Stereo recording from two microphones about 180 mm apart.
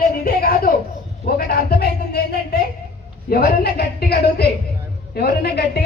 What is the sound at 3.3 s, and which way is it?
A woman's voice, 60° left (ahead or behind).